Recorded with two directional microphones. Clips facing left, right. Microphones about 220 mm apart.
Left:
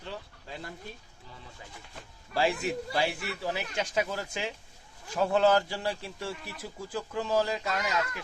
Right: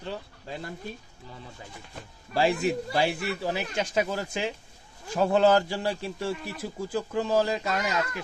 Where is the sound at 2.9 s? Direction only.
30° right (ahead or behind).